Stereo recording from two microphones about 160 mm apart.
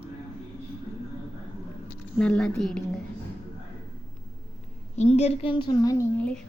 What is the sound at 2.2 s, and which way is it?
Speech, 5° left (ahead or behind).